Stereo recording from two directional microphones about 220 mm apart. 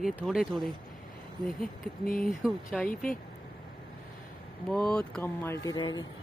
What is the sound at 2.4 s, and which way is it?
Speech, centre (ahead or behind).